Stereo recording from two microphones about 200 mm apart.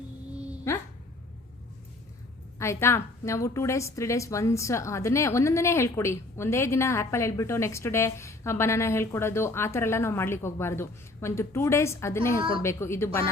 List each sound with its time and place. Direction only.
0.7 s a sound: 15° left (ahead or behind)
2.6 s a woman's voice: 15° left (ahead or behind)
12.4 s a woman's voice: 25° right (ahead or behind)
12.6 s a woman's voice: 15° left (ahead or behind)